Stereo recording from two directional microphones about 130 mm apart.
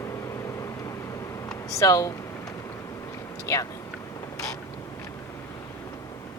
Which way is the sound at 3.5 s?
25° left (ahead or behind).